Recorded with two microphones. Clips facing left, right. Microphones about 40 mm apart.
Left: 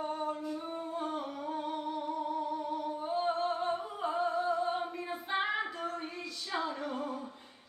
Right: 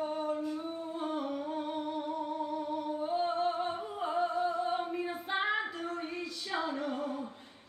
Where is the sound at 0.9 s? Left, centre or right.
Centre.